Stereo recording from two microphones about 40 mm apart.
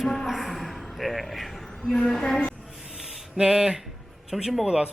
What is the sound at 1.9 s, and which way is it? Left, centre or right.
Speech, centre.